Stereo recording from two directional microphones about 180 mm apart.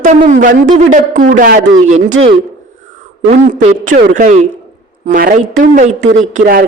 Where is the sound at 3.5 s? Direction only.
40° right (ahead or behind).